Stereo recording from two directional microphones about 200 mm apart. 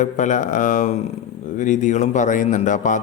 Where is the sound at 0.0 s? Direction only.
40° left (ahead or behind).